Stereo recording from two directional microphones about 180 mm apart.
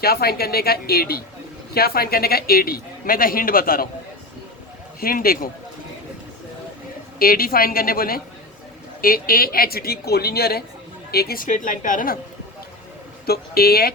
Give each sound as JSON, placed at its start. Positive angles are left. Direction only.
{"t": 0.0, "sound": "speech", "side_deg": 60}
{"t": 4.9, "sound": "speech", "side_deg": 55}
{"t": 7.2, "sound": "a woman's voice", "side_deg": 55}
{"t": 13.2, "sound": "speech", "side_deg": 60}